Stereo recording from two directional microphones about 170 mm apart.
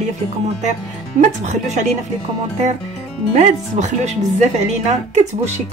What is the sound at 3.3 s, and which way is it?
Speech, 45° right (ahead or behind).